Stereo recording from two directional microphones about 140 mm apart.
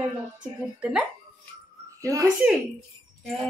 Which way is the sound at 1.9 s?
20° right (ahead or behind).